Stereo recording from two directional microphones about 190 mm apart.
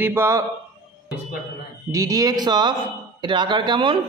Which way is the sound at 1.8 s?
20° right (ahead or behind).